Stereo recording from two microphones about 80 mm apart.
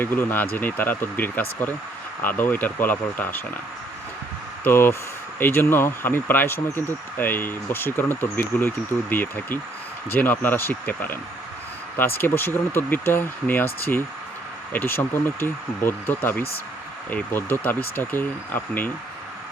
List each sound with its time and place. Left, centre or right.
0.0 s speech: left
4.6 s speech: left
14.7 s speech: left